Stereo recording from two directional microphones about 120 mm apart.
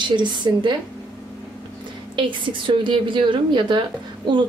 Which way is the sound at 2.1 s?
40° right (ahead or behind).